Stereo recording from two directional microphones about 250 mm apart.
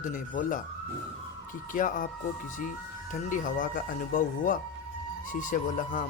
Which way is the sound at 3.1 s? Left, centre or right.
Left.